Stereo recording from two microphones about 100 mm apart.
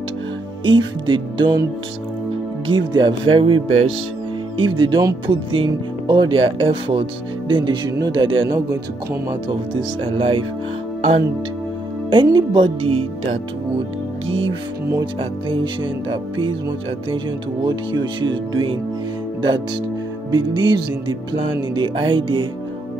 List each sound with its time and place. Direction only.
0.7 s speech: 55° right (ahead or behind)
2.6 s speech: 50° right (ahead or behind)
4.6 s speech: 55° right (ahead or behind)
10.0 s speech: 65° right (ahead or behind)
12.1 s speech: 50° right (ahead or behind); by 13.4 s 70° right (ahead or behind)
15.1 s speech: 60° right (ahead or behind)
17.6 s speech: 45° right (ahead or behind)
20.2 s speech: 45° right (ahead or behind)